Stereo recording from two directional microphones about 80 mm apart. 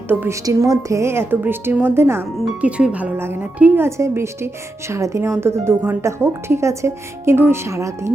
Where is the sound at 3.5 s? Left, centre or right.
Centre.